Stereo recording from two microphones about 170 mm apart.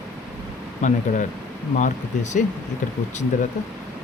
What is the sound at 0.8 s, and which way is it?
Speech, 45° left (ahead or behind).